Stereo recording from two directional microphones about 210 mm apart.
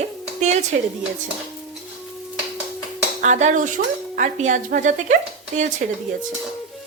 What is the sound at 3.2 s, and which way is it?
Speech, 35° right (ahead or behind).